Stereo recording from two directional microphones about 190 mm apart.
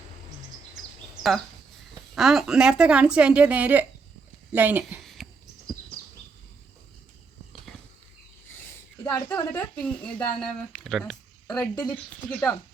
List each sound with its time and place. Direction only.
2.1 s speech: centre (ahead or behind)
5.0 s cricket: centre (ahead or behind)
9.0 s speech: 10° left (ahead or behind)
11.7 s speech: 20° left (ahead or behind)
11.9 s speech: 5° left (ahead or behind)